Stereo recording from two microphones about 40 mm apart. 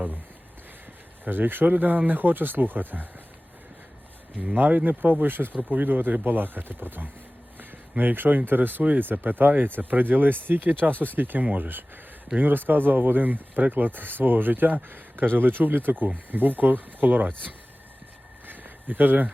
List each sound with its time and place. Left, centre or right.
1.2 s speech: right
1.7 s speech: right
4.5 s speech: right
7.6 s a sound: right
8.4 s speech: right
11.4 s speech: right
12.4 s speech: right
18.4 s a sound: right